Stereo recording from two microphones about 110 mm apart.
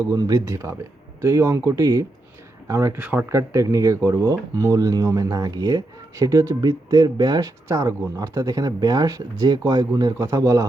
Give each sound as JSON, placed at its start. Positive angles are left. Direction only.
{"t": 0.1, "sound": "speech", "side_deg": -35}
{"t": 3.0, "sound": "speech", "side_deg": -15}
{"t": 3.3, "sound": "speech", "side_deg": -30}